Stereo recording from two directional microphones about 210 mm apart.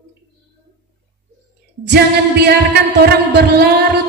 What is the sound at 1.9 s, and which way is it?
Speech, 50° right (ahead or behind).